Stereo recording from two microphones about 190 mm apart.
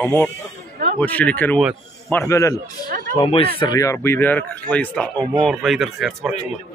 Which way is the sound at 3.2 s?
30° left (ahead or behind).